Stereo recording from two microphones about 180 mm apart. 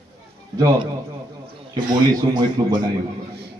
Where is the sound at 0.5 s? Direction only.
20° right (ahead or behind).